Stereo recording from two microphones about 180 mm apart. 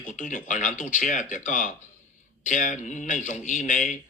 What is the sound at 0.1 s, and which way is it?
Speech, 45° left (ahead or behind).